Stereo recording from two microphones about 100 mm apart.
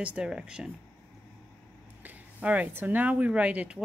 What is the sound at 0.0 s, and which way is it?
Speech, 10° right (ahead or behind).